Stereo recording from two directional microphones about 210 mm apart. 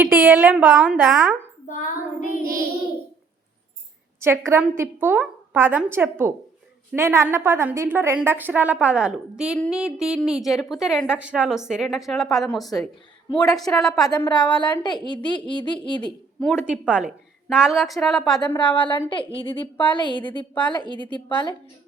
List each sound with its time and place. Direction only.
0.0 s a woman's voice: 10° right (ahead or behind)
1.6 s child singing: 40° left (ahead or behind)
4.2 s a woman's voice: 10° right (ahead or behind)
14.1 s a woman's voice: 20° left (ahead or behind)
16.0 s a woman's voice: centre (ahead or behind)
18.4 s a woman's voice: 20° left (ahead or behind)
20.5 s a woman's voice: 5° left (ahead or behind)